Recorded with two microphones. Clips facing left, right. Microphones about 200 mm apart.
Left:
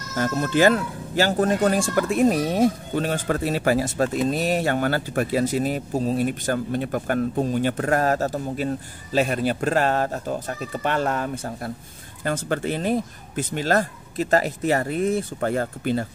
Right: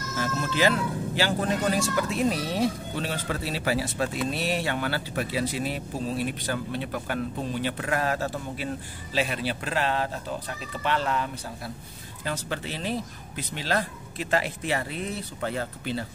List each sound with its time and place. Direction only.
0.1 s speech: 50° left (ahead or behind)